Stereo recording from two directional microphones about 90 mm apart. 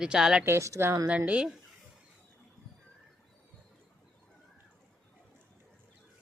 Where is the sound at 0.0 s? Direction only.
10° right (ahead or behind).